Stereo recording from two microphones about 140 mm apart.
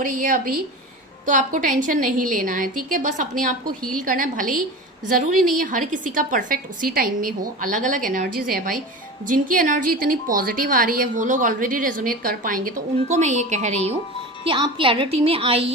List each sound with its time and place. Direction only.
0.0 s a woman's voice: 70° right (ahead or behind)
14.4 s a woman's voice: 35° right (ahead or behind)